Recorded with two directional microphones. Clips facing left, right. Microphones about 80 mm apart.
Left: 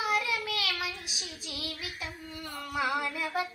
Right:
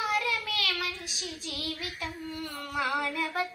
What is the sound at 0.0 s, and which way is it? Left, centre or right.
Child singing, centre.